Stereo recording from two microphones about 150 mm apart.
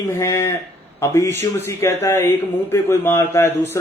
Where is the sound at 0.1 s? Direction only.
20° left (ahead or behind).